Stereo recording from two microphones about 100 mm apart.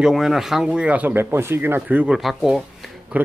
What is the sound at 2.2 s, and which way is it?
Speech, centre (ahead or behind).